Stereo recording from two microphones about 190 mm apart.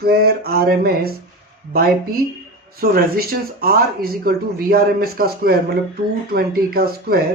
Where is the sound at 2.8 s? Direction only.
50° right (ahead or behind).